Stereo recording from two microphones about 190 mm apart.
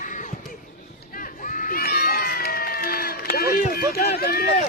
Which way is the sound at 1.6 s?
50° left (ahead or behind).